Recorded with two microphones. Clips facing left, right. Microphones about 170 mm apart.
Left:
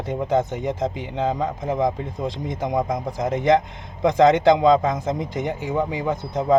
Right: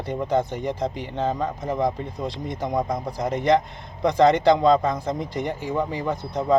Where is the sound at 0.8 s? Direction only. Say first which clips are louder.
Left 2 dB; 15° left (ahead or behind).